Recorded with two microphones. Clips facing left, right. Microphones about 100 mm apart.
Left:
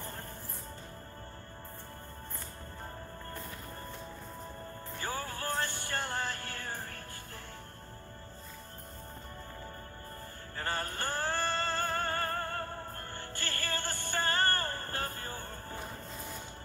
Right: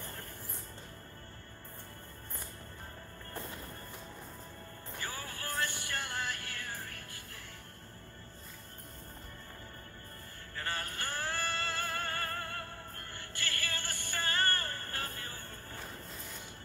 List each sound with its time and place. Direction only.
5.0 s music: 35° left (ahead or behind)
10.5 s music: 30° left (ahead or behind)